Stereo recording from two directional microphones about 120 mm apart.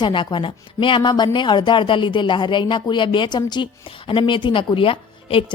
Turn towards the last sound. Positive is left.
turn(degrees=50)  # may be behind; listen again after turning